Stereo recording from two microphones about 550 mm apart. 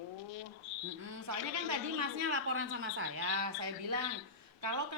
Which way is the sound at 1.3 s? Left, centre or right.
Right.